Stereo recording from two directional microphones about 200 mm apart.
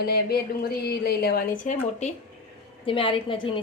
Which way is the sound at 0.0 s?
55° left (ahead or behind).